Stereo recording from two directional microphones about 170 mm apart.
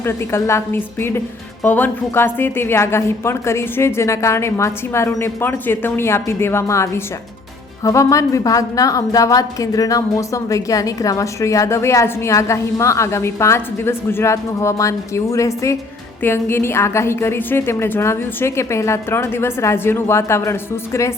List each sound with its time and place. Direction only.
0.0 s a woman's voice: 15° left (ahead or behind)